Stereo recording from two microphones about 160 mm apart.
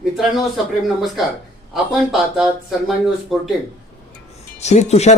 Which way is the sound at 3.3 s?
Centre (ahead or behind).